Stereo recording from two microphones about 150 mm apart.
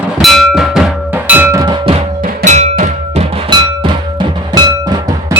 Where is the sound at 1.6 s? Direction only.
30° right (ahead or behind).